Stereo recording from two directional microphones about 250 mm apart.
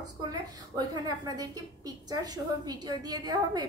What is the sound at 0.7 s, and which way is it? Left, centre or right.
A woman's voice, centre.